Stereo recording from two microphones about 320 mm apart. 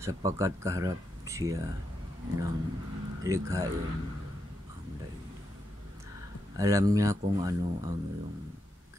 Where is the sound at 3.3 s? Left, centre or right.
Centre.